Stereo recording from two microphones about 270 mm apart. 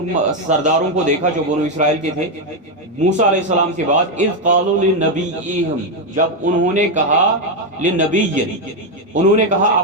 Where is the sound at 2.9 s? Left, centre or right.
Right.